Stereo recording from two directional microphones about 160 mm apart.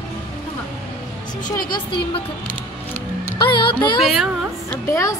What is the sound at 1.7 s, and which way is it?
Speech, 30° left (ahead or behind).